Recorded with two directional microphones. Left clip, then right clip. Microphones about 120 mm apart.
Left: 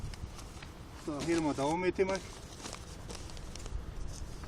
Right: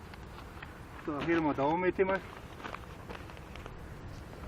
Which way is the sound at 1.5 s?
35° left (ahead or behind).